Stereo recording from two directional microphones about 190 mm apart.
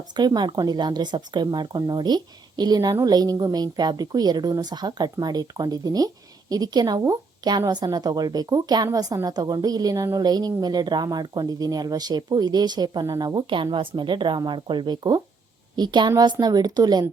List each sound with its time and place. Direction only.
0.2 s a woman's voice: 20° right (ahead or behind)